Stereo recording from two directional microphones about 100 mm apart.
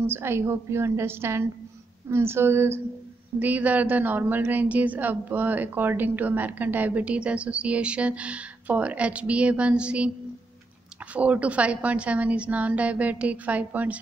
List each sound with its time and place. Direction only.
0.0 s a woman's voice: 25° right (ahead or behind)
11.1 s a woman's voice: 15° right (ahead or behind)